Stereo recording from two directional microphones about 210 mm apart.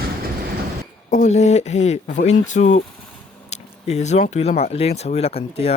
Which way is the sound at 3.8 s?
30° left (ahead or behind).